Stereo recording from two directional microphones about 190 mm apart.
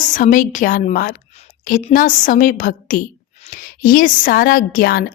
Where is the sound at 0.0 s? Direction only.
45° left (ahead or behind).